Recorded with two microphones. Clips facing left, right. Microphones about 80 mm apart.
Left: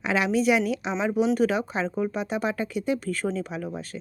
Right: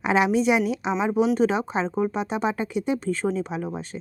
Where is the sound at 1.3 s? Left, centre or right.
Right.